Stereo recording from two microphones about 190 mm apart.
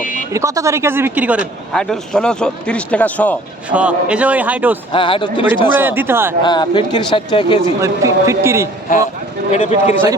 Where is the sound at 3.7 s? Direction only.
5° right (ahead or behind).